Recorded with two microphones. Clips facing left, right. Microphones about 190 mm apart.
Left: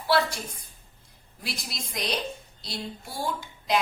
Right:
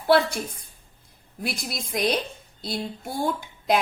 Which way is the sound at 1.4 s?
55° right (ahead or behind).